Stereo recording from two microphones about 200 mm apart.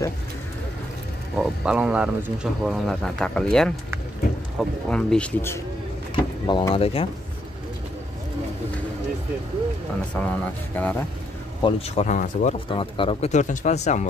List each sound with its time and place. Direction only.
1.3 s speech: centre (ahead or behind)
6.1 s speech: 20° left (ahead or behind)
10.1 s speech: 5° left (ahead or behind)
11.6 s speech: 35° left (ahead or behind)